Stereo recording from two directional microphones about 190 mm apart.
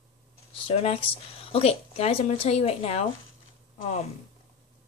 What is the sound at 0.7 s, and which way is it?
A woman's voice, 30° left (ahead or behind).